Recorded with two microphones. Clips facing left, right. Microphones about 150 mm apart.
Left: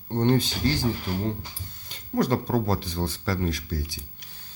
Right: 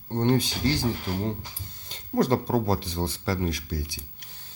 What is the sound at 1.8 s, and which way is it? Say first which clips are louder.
Speech: right 1 dB; 30° right (ahead or behind).